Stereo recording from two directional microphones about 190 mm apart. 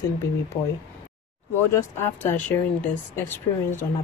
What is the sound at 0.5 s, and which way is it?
Speech, 25° left (ahead or behind).